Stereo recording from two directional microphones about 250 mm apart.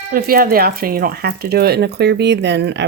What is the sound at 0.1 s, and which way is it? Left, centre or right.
Speech, right.